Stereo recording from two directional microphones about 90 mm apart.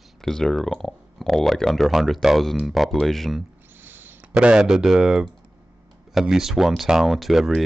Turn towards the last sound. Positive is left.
turn(degrees=0)  # may be behind; listen again after turning